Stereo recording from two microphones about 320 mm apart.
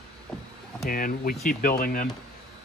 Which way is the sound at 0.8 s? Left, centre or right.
Left.